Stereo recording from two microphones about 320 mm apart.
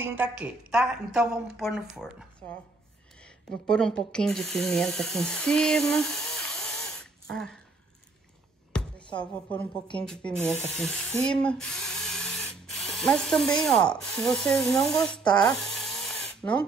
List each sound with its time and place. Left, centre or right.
0.0 s speech: centre
3.6 s speech: centre
9.2 s speech: centre
15.7 s a sound: centre
16.4 s speech: centre